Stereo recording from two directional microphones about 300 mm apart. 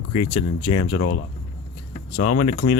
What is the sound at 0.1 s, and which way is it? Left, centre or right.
Speech, left.